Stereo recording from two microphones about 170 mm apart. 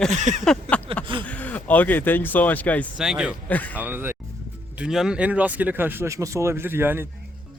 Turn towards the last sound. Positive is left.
turn(degrees=-15)  # may be behind; listen again after turning